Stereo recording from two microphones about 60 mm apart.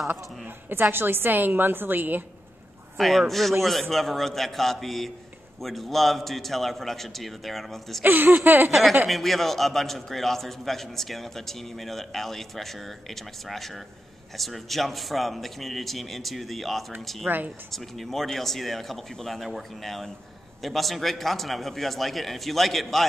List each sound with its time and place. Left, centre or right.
0.7 s a woman's voice: right
3.0 s a man's voice: centre
8.0 s a woman's voice: right
9.1 s a man's voice: centre